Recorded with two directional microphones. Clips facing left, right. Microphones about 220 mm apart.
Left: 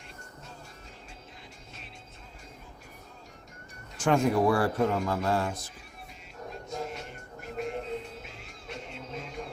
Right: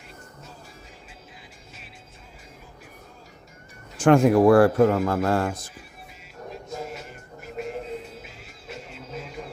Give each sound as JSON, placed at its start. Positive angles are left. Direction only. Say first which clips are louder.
{"t": 3.9, "sound": "a man's voice", "louder": "right 8 dB", "side_deg": -50}
{"t": 6.7, "sound": "music", "louder": "even", "side_deg": -5}